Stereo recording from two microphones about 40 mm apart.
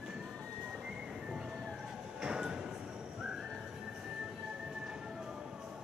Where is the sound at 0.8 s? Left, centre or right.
Centre.